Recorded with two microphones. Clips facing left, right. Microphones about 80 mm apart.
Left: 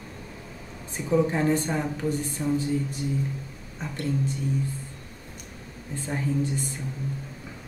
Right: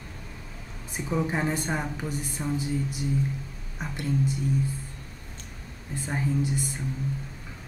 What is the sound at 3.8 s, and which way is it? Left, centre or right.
Speech, centre.